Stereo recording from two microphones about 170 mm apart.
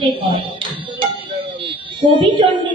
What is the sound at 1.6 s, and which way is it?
Music, 30° right (ahead or behind).